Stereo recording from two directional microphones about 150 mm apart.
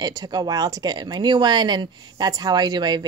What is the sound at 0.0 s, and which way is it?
Speech, 25° right (ahead or behind).